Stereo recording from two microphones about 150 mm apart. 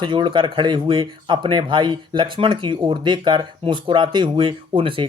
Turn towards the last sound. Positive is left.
turn(degrees=-35)  # may be behind; listen again after turning